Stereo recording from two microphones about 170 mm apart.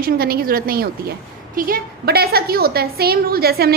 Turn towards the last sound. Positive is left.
turn(degrees=-65)  # may be behind; listen again after turning